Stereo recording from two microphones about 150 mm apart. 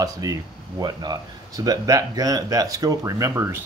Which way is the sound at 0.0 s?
25° right (ahead or behind).